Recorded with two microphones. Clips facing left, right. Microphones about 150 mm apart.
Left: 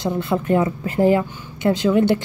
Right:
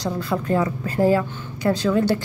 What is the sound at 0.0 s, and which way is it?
A woman's voice, 25° left (ahead or behind).